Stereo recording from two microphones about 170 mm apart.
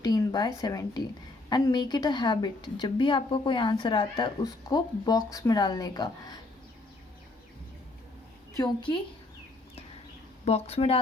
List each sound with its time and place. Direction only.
0.0 s a woman's voice: 25° left (ahead or behind)
8.5 s a woman's voice: 25° left (ahead or behind)
10.4 s speech: 40° left (ahead or behind)